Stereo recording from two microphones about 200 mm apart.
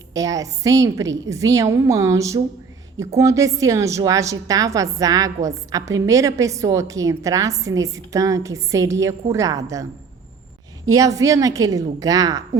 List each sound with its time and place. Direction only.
0.1 s a woman's voice: 15° right (ahead or behind)
10.8 s a woman's voice: 15° right (ahead or behind)